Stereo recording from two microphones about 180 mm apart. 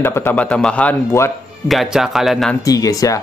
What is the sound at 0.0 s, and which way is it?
Speech, 15° left (ahead or behind).